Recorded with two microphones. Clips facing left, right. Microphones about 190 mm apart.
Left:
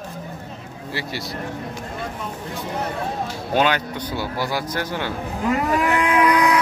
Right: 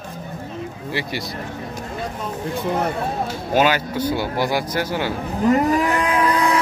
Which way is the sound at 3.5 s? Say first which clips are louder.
Right 2 dB; 5° right (ahead or behind).